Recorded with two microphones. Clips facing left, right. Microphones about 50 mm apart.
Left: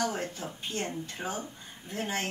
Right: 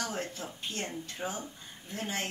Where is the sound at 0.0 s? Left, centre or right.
Left.